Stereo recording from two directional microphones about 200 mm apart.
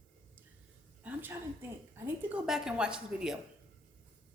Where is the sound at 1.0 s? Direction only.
10° right (ahead or behind).